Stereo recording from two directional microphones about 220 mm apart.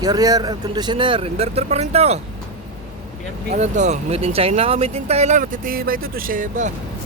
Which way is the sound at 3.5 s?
30° right (ahead or behind).